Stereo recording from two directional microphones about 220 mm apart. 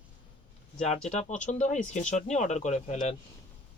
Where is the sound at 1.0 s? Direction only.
30° left (ahead or behind).